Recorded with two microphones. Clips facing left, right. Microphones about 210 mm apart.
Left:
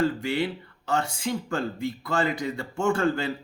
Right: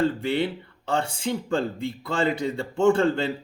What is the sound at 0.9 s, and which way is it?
A man's voice, 30° right (ahead or behind).